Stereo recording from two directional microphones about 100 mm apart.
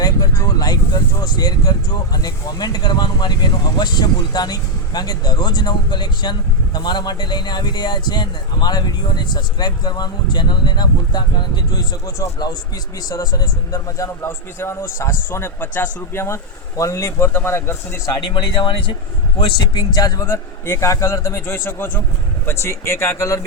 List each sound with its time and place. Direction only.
0.0 s a man's voice: 40° left (ahead or behind)
18.2 s speech: 50° left (ahead or behind)
20.2 s a man's voice: 25° left (ahead or behind)